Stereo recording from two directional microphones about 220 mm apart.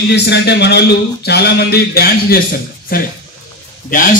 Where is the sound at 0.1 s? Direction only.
50° left (ahead or behind).